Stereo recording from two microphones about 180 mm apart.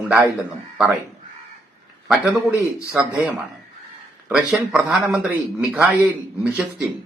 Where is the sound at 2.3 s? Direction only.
15° right (ahead or behind).